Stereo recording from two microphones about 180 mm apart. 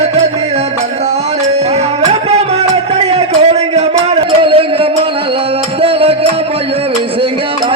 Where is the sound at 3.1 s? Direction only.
35° right (ahead or behind).